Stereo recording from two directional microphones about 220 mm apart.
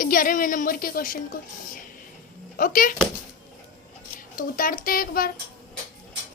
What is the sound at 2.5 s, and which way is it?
Speech, 40° left (ahead or behind).